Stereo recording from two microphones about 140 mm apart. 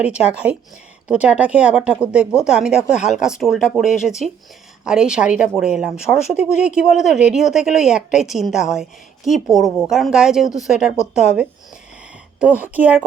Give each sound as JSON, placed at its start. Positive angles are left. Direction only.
{"t": 0.0, "sound": "speech", "side_deg": -5}